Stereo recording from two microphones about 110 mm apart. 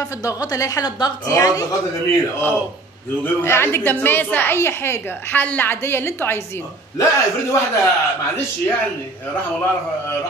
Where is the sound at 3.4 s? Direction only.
20° left (ahead or behind).